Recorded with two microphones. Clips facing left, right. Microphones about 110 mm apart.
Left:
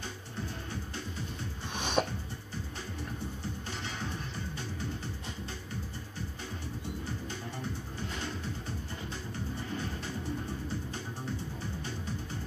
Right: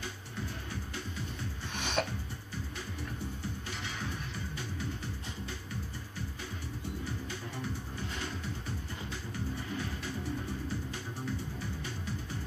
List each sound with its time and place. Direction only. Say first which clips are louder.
1.8 s music: left 3 dB; 15° left (ahead or behind)